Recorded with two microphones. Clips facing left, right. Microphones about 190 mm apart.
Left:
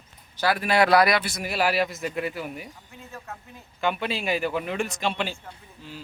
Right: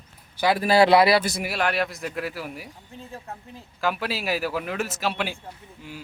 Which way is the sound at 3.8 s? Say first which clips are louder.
Even; centre (ahead or behind).